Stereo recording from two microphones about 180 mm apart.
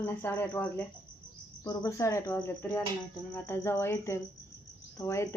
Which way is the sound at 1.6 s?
20° left (ahead or behind).